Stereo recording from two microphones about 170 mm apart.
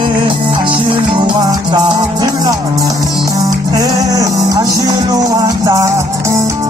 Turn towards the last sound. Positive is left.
turn(degrees=-15)  # may be behind; listen again after turning